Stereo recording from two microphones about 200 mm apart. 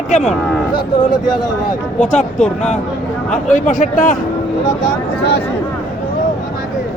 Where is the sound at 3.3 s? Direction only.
40° left (ahead or behind).